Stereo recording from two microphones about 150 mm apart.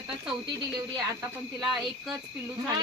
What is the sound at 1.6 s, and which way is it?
Speech, 5° right (ahead or behind).